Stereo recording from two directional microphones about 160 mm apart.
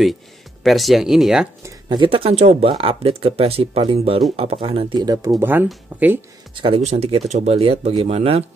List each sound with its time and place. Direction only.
0.7 s speech: centre (ahead or behind)
1.9 s speech: 30° right (ahead or behind)
5.4 s speech: 10° right (ahead or behind)
6.5 s speech: 35° right (ahead or behind)